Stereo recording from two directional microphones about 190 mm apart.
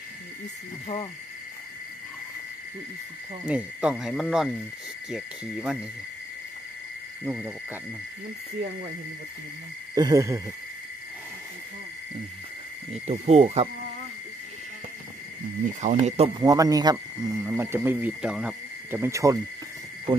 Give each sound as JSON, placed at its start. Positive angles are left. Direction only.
{"t": 3.4, "sound": "speech", "side_deg": -5}
{"t": 7.2, "sound": "speech", "side_deg": -10}
{"t": 9.9, "sound": "speech", "side_deg": -20}
{"t": 12.9, "sound": "speech", "side_deg": -35}
{"t": 15.8, "sound": "speech", "side_deg": -40}
{"t": 16.3, "sound": "speech", "side_deg": -20}